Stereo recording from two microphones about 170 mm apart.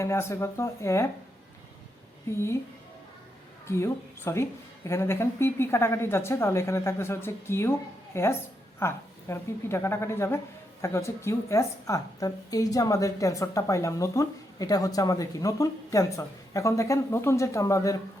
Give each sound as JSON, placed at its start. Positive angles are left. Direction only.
{"t": 0.0, "sound": "speech", "side_deg": 15}
{"t": 3.7, "sound": "a woman's voice", "side_deg": 15}